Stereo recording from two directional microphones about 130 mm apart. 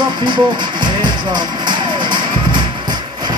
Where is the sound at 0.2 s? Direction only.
35° right (ahead or behind).